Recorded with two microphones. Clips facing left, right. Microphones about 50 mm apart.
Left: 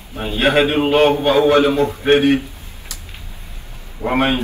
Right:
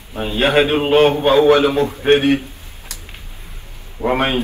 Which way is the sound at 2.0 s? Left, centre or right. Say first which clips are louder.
Even; right.